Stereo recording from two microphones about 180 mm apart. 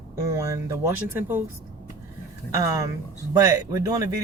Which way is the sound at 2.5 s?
20° right (ahead or behind).